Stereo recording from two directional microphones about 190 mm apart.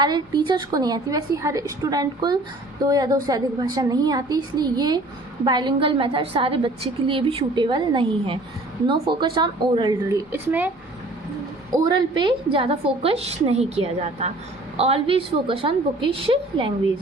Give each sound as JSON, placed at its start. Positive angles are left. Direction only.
{"t": 0.0, "sound": "a woman's voice", "side_deg": -20}
{"t": 10.3, "sound": "speech", "side_deg": -10}
{"t": 11.7, "sound": "a woman's voice", "side_deg": -20}